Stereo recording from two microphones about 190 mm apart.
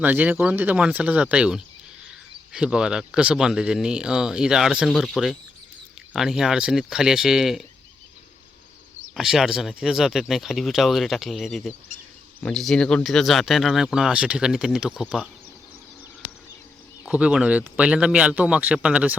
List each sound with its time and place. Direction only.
0.0 s speech: 10° right (ahead or behind)
9.1 s speech: centre (ahead or behind)
17.1 s speech: 5° right (ahead or behind)